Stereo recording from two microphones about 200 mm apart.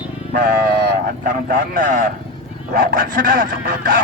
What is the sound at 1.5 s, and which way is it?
Speech, 45° right (ahead or behind).